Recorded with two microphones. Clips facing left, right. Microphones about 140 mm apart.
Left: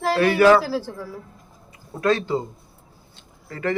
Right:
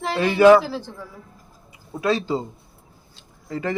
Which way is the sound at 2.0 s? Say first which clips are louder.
Left 1 dB; 10° right (ahead or behind).